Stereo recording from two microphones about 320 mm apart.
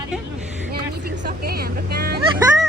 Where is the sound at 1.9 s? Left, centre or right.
Right.